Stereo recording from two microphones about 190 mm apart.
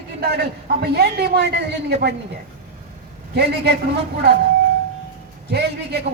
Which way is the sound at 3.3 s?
60° right (ahead or behind).